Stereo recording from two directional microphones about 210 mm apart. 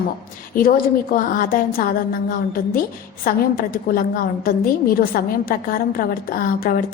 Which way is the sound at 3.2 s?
40° left (ahead or behind).